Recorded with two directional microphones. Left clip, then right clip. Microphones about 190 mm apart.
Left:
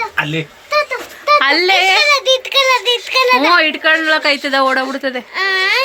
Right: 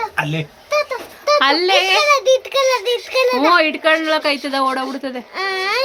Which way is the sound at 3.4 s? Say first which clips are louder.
Left 2 dB; 5° right (ahead or behind).